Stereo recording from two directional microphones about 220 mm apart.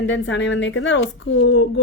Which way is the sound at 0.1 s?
55° left (ahead or behind).